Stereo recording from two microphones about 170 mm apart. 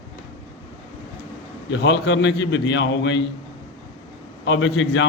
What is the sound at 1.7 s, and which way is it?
A man's voice, 90° left.